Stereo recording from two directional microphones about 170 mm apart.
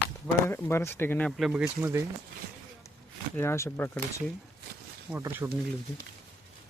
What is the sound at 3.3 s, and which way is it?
Speech, 15° left (ahead or behind).